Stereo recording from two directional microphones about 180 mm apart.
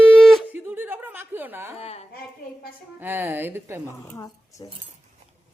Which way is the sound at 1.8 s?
35° left (ahead or behind).